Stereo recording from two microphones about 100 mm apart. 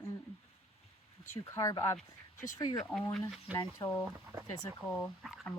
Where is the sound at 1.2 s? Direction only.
35° left (ahead or behind); by 3.8 s 50° left (ahead or behind).